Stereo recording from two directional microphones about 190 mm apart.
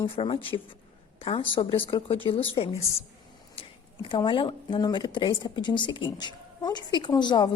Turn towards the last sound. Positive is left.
turn(degrees=25)  # may be behind; listen again after turning